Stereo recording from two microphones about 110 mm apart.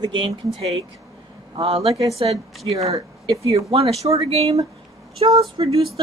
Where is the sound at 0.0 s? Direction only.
45° right (ahead or behind).